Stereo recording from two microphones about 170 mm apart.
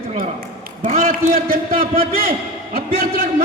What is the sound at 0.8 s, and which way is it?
Speech, 50° right (ahead or behind).